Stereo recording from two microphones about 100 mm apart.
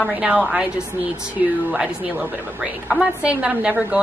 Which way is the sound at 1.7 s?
10° right (ahead or behind).